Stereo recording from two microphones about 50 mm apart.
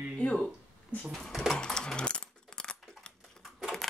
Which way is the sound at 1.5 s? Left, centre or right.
Centre.